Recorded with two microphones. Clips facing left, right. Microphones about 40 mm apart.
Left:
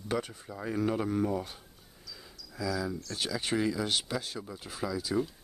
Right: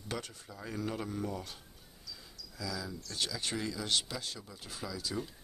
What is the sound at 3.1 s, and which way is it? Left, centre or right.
Speech, left.